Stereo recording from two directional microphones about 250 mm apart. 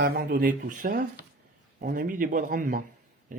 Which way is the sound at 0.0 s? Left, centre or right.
Right.